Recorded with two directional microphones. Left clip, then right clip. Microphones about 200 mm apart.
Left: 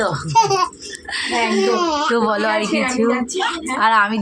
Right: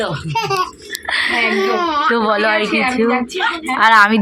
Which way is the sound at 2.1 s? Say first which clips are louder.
Right 3 dB; centre (ahead or behind).